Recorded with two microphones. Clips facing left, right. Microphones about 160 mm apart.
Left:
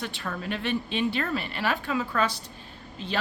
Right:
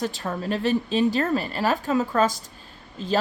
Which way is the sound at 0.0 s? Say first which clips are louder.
Right 6 dB; 40° right (ahead or behind).